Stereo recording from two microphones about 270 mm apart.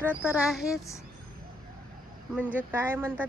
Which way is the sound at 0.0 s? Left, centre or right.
Centre.